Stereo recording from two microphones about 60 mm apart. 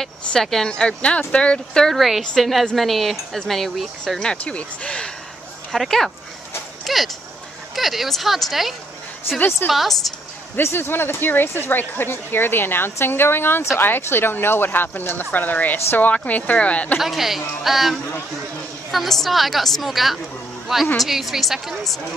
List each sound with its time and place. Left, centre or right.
0.0 s speech: centre
0.7 s speech: centre
2.0 s speech: centre
4.2 s speech: centre
5.7 s speech: centre
10.5 s speech: left
17.0 s a woman's voice: centre